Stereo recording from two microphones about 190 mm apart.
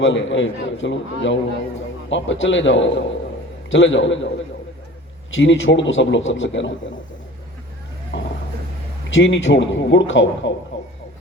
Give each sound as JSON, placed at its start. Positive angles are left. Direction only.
{"t": 0.0, "sound": "a man's voice", "side_deg": 80}
{"t": 5.3, "sound": "a man's voice", "side_deg": 85}
{"t": 9.0, "sound": "a man's voice", "side_deg": 75}